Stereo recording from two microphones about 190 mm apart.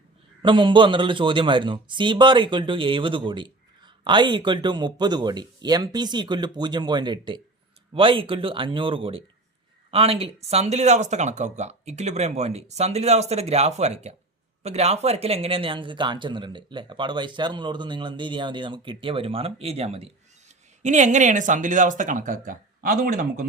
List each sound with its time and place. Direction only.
0.4 s a man's voice: 25° right (ahead or behind); by 23.5 s 50° right (ahead or behind)